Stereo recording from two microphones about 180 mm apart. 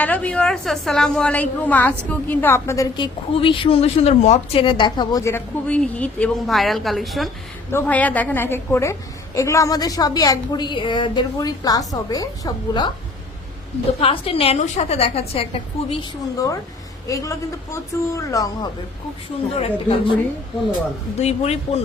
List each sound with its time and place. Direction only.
0.0 s a woman's voice: 10° left (ahead or behind)
7.7 s a woman's voice: 10° left (ahead or behind)
14.0 s a woman's voice: 30° left (ahead or behind)
15.9 s a woman's voice: 20° left (ahead or behind)
19.5 s a woman's voice: 35° left (ahead or behind)
21.2 s a woman's voice: 35° left (ahead or behind)